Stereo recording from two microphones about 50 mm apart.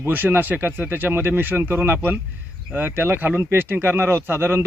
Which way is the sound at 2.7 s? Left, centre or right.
Right.